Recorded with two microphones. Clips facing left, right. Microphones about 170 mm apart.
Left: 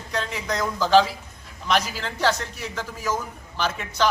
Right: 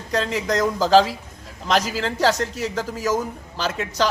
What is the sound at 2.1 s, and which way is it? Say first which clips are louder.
Speech: right 4 dB; 40° right (ahead or behind).